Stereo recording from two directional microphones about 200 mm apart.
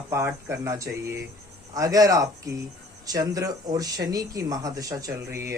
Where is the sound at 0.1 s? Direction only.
15° right (ahead or behind).